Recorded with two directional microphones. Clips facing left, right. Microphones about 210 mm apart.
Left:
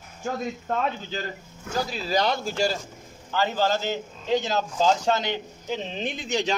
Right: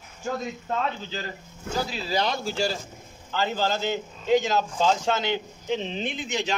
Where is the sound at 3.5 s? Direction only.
40° left (ahead or behind).